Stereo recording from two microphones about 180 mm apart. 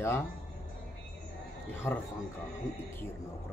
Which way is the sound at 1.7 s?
15° left (ahead or behind).